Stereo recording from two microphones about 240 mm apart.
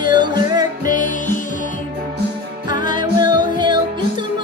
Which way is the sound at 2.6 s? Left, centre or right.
Centre.